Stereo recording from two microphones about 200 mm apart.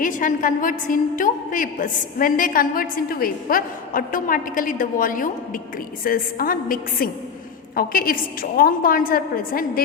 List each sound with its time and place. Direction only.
0.0 s a woman's voice: 40° left (ahead or behind)